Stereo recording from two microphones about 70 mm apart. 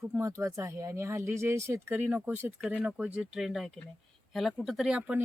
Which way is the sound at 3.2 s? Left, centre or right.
Centre.